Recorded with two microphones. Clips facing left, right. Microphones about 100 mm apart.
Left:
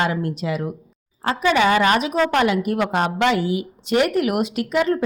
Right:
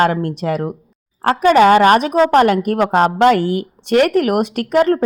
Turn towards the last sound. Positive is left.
turn(degrees=-50)  # may be behind; listen again after turning